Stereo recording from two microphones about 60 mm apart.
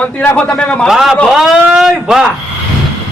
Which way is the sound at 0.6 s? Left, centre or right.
Centre.